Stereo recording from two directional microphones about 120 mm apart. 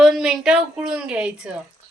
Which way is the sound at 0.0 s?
5° right (ahead or behind).